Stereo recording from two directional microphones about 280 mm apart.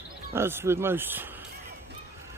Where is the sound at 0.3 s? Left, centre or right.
Centre.